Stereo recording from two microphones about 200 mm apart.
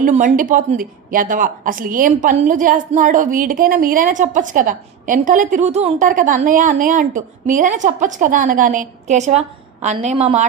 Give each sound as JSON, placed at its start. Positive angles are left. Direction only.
{"t": 0.0, "sound": "speech", "side_deg": -40}